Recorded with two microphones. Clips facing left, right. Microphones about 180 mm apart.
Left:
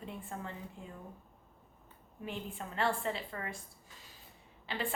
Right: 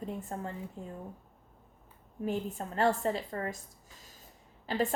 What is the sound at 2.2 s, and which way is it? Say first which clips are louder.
A woman's voice: right 8 dB; 40° right (ahead or behind).